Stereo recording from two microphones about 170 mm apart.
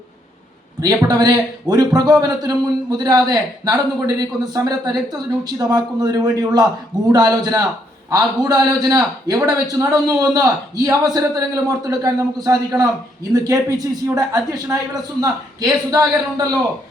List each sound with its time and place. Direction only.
0.8 s a man's voice: 20° right (ahead or behind)